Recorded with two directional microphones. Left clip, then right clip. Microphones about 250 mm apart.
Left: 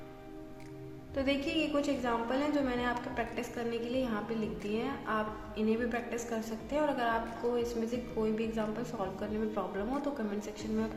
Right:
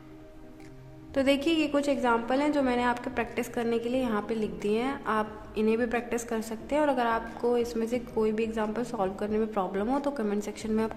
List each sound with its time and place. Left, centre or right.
1.1 s a woman's voice: right